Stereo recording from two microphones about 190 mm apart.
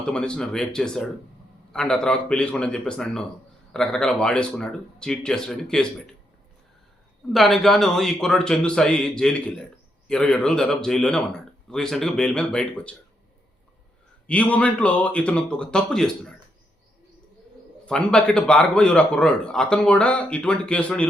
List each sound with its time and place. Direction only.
0.0 s a man's voice: 5° left (ahead or behind)
7.3 s a man's voice: centre (ahead or behind)
14.3 s a man's voice: 5° left (ahead or behind)
17.8 s a man's voice: 5° left (ahead or behind)